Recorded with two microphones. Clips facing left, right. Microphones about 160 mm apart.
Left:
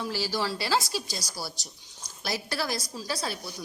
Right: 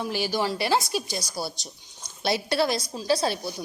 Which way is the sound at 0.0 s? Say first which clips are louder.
Right 4 dB; 20° right (ahead or behind).